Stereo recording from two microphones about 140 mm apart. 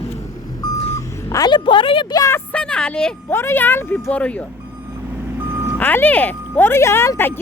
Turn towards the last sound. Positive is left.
turn(degrees=15)  # may be behind; listen again after turning